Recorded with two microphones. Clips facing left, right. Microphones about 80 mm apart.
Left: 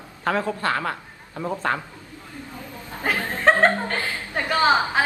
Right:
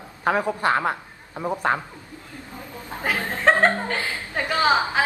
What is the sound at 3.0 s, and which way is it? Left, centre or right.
Speech, centre.